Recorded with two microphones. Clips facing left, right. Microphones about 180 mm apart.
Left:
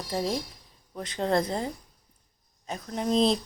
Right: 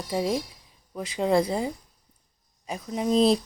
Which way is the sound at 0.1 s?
10° right (ahead or behind).